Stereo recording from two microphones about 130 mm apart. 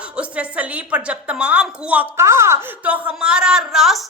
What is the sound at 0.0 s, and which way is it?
A woman's voice, 10° right (ahead or behind).